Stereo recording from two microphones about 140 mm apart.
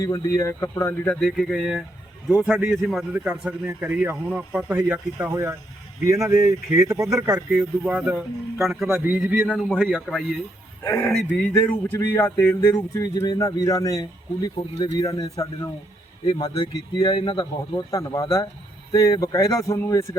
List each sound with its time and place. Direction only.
0.0 s speech: 25° left (ahead or behind); by 1.8 s centre (ahead or behind)
2.8 s speech: centre (ahead or behind); by 7.4 s 20° right (ahead or behind)
7.5 s speech: 10° right (ahead or behind)
9.5 s speech: 5° left (ahead or behind)
10.8 s speech: 20° left (ahead or behind)